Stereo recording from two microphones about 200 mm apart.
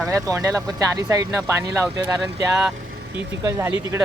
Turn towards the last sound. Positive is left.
turn(degrees=-10)  # may be behind; listen again after turning